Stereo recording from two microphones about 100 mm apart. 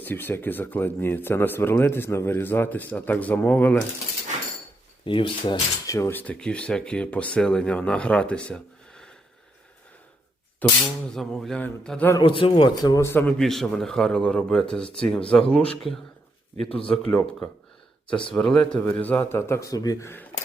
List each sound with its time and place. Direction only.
0.0 s speech: 20° left (ahead or behind)
5.0 s speech: 60° left (ahead or behind)
5.8 s speech: 30° left (ahead or behind)
6.1 s speech: 10° left (ahead or behind)
10.6 s speech: 15° left (ahead or behind)
11.1 s a sound: 5° left (ahead or behind)
11.6 s speech: 10° left (ahead or behind)
12.2 s speech: 60° left (ahead or behind)
13.0 s speech: 25° left (ahead or behind)
13.4 s speech: 5° left (ahead or behind)
16.6 s speech: 70° left (ahead or behind)
17.1 s speech: 15° left (ahead or behind); by 20.1 s 40° left (ahead or behind)